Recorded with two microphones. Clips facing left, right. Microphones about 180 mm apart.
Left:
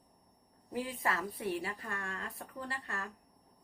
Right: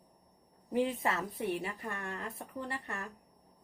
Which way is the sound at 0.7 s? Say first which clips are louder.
Right 5 dB; 25° right (ahead or behind).